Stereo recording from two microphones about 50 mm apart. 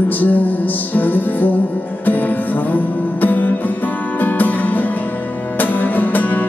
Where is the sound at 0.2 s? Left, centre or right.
Left.